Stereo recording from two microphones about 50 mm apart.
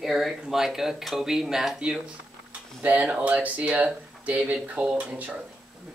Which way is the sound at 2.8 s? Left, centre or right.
Right.